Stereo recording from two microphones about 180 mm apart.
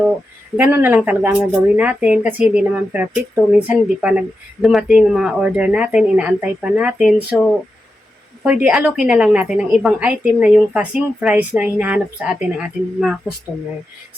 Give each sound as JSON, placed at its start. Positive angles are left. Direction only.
{"t": 0.5, "sound": "a woman's voice", "side_deg": -10}
{"t": 8.4, "sound": "a woman's voice", "side_deg": -5}